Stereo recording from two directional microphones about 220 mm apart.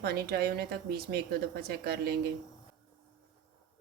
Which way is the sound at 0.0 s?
45° right (ahead or behind).